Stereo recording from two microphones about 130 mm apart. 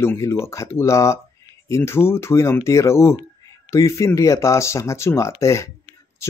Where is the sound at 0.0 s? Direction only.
20° left (ahead or behind).